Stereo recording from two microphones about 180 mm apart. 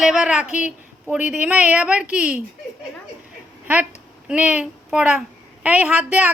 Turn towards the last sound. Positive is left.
turn(degrees=-10)  # may be behind; listen again after turning